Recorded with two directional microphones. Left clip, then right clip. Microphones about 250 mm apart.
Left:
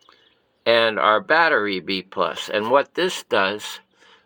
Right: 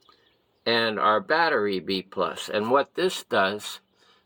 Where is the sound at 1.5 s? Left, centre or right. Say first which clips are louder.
Left 4 dB; centre.